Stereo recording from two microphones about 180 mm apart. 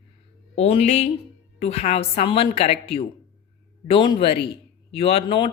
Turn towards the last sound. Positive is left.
turn(degrees=30)  # may be behind; listen again after turning